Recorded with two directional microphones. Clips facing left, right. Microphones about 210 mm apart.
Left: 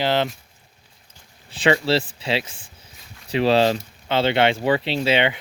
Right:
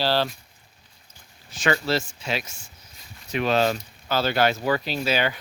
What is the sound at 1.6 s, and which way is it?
Speech, 30° left (ahead or behind).